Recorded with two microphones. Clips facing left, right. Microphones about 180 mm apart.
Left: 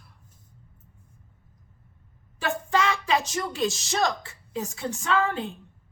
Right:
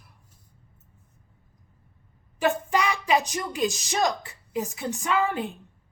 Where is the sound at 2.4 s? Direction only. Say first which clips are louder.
Right 2 dB; 15° right (ahead or behind).